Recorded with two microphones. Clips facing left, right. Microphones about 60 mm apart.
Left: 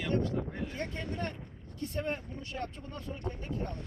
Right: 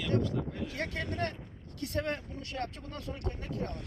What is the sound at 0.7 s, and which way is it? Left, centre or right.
Speech, right.